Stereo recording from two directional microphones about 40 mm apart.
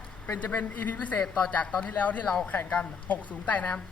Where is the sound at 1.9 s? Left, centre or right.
Left.